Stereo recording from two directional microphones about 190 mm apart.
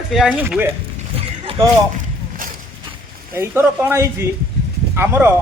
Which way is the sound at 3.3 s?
10° right (ahead or behind).